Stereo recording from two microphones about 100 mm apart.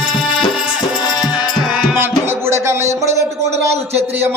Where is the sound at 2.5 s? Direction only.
30° right (ahead or behind).